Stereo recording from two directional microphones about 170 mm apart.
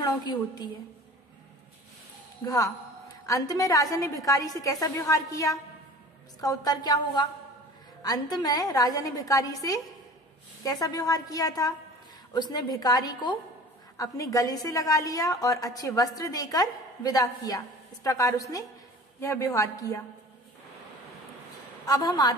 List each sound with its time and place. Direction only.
0.0 s a woman's voice: 25° left (ahead or behind)
2.4 s a woman's voice: 20° left (ahead or behind)
21.8 s a woman's voice: 20° left (ahead or behind)